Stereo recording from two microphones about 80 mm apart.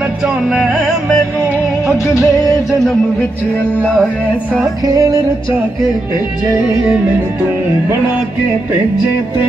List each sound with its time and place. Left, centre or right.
0.5 s music: centre
1.9 s music: left
4.8 s music: right